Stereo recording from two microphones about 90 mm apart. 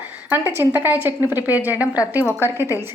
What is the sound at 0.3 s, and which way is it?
A woman's voice, 25° right (ahead or behind).